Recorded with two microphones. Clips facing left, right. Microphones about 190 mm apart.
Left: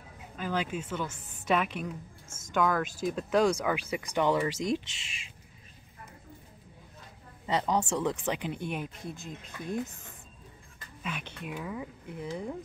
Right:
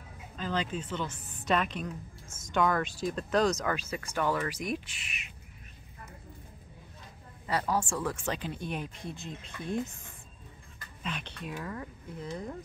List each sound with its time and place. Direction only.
0.4 s speech: 10° left (ahead or behind)
2.2 s music: 25° left (ahead or behind)
2.5 s speech: 5° left (ahead or behind); by 5.3 s 25° left (ahead or behind)
7.4 s speech: 20° left (ahead or behind)
9.0 s speech: centre (ahead or behind)
11.0 s speech: 10° left (ahead or behind)